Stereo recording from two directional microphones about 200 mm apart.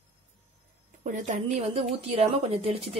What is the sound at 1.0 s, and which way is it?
A woman's voice, 40° right (ahead or behind).